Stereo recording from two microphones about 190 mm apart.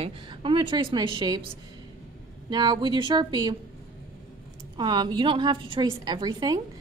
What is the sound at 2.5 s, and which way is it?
Speech, 25° right (ahead or behind).